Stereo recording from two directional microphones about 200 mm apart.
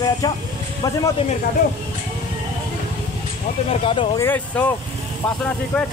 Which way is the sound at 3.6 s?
25° left (ahead or behind).